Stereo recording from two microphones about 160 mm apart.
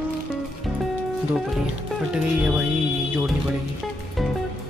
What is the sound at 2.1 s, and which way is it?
Speech, 5° right (ahead or behind).